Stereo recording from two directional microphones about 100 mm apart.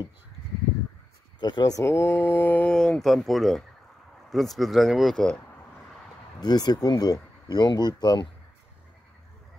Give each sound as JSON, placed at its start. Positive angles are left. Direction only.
{"t": 1.4, "sound": "speech", "side_deg": 40}
{"t": 6.4, "sound": "speech", "side_deg": 40}